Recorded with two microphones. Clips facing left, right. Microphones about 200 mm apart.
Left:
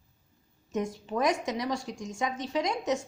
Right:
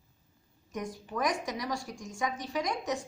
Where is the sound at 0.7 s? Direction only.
25° left (ahead or behind).